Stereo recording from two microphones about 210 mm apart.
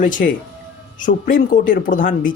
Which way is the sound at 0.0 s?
40° left (ahead or behind).